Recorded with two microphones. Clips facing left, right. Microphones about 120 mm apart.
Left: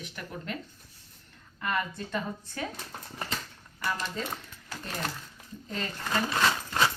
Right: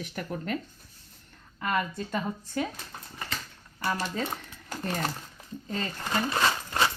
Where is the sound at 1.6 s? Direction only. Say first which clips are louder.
Right 2 dB; 30° right (ahead or behind).